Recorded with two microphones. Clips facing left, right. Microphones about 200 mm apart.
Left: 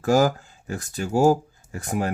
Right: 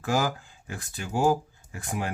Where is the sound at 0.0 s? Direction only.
40° left (ahead or behind).